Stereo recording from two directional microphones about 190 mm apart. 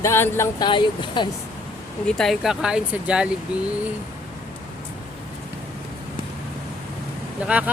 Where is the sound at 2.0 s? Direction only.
Centre (ahead or behind).